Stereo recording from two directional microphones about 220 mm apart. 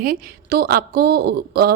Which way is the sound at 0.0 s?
40° right (ahead or behind).